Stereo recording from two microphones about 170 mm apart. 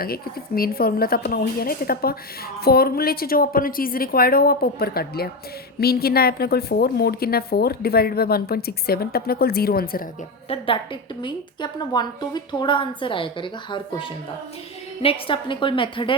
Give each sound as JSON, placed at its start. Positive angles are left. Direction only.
{"t": 0.0, "sound": "a woman's voice", "side_deg": 60}
{"t": 10.5, "sound": "a woman's voice", "side_deg": 35}